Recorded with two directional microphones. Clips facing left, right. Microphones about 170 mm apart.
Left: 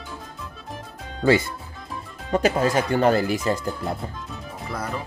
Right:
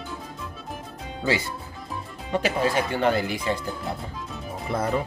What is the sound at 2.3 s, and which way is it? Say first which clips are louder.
Speech: left 3 dB; 45° left (ahead or behind).